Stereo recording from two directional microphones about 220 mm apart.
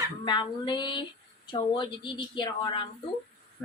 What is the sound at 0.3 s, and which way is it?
A woman's voice, 20° left (ahead or behind).